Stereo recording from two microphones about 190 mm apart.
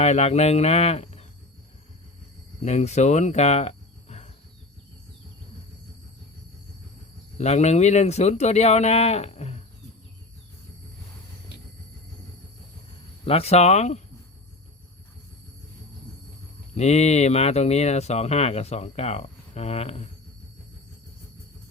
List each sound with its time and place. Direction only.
0.0 s speech: 35° left (ahead or behind)
2.6 s speech: 35° left (ahead or behind)
7.3 s speech: 35° left (ahead or behind)
13.2 s speech: 30° left (ahead or behind)
16.7 s speech: 35° left (ahead or behind)